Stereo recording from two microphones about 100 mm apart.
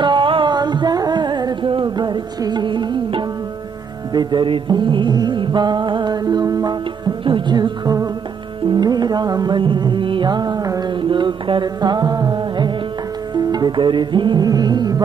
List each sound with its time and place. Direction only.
0.0 s music: 55° right (ahead or behind)
7.2 s music: 55° right (ahead or behind)